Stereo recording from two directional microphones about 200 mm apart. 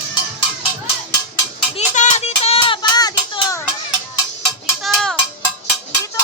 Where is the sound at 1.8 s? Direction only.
35° left (ahead or behind); by 3.5 s 20° left (ahead or behind).